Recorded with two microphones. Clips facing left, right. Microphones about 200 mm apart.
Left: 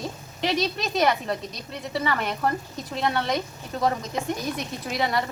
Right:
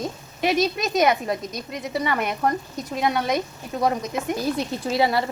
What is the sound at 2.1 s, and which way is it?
Speech, 5° right (ahead or behind).